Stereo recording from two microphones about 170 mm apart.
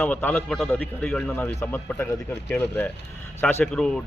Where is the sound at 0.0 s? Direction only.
10° left (ahead or behind).